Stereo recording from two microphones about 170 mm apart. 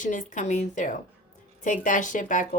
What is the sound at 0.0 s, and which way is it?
A woman's voice, 50° left (ahead or behind).